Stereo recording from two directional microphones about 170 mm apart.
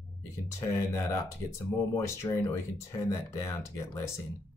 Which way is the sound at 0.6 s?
20° left (ahead or behind).